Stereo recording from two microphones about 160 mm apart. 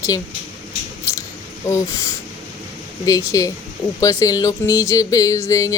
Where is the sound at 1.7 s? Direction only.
20° left (ahead or behind).